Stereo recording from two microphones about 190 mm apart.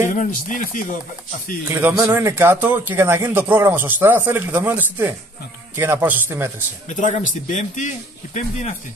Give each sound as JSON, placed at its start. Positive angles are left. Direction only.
{"t": 0.1, "sound": "speech", "side_deg": 45}
{"t": 1.7, "sound": "a man's voice", "side_deg": -10}
{"t": 6.9, "sound": "a man's voice", "side_deg": 40}